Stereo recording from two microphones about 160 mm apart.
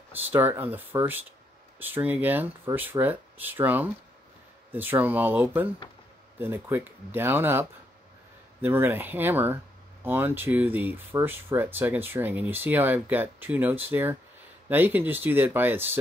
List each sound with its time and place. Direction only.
0.2 s speech: 10° right (ahead or behind)